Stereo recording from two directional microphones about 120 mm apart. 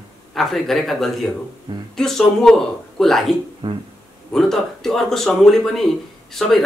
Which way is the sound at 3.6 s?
50° right (ahead or behind).